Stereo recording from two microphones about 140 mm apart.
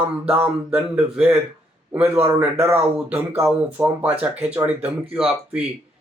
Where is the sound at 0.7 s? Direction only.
5° right (ahead or behind).